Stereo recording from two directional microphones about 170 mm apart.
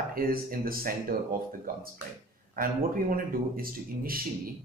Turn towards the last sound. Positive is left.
turn(degrees=-60)  # may be behind; listen again after turning